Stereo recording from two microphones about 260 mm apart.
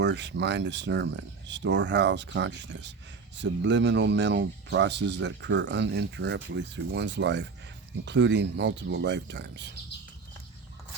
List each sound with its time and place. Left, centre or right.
0.0 s speech: right